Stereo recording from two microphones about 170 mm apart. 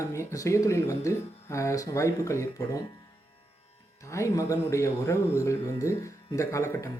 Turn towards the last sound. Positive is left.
turn(degrees=15)  # may be behind; listen again after turning